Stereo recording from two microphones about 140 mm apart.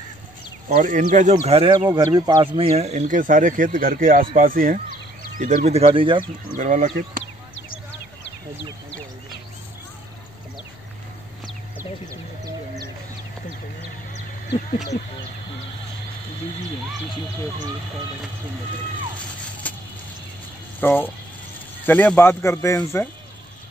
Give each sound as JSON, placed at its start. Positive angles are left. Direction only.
{"t": 0.7, "sound": "speech", "side_deg": -75}
{"t": 2.1, "sound": "speech", "side_deg": -30}
{"t": 3.1, "sound": "speech", "side_deg": -70}
{"t": 5.4, "sound": "speech", "side_deg": -55}
{"t": 6.5, "sound": "speech", "side_deg": -70}
{"t": 14.7, "sound": "speech", "side_deg": 60}
{"t": 19.6, "sound": "vehicle", "side_deg": 10}
{"t": 20.8, "sound": "speech", "side_deg": 15}